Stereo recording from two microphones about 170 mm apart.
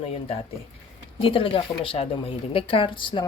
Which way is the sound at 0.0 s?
35° left (ahead or behind).